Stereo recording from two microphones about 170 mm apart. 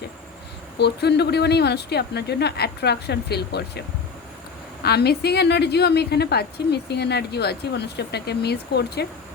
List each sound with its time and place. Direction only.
0.8 s a woman's voice: 75° left (ahead or behind)